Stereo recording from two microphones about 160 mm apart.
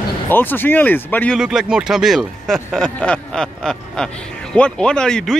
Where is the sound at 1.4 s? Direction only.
5° right (ahead or behind).